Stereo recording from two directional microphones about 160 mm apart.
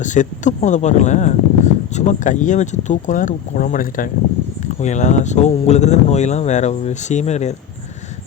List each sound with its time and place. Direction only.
0.0 s speech: 50° left (ahead or behind)
4.6 s speech: 50° left (ahead or behind)